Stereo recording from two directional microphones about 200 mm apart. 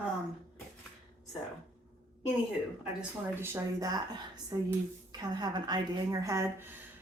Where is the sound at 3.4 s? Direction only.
10° right (ahead or behind).